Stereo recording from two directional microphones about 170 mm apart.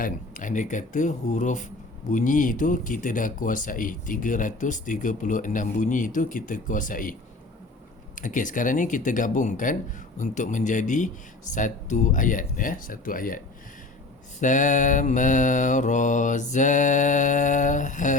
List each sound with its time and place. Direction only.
0.0 s speech: 50° left (ahead or behind)
14.4 s speech: 50° left (ahead or behind)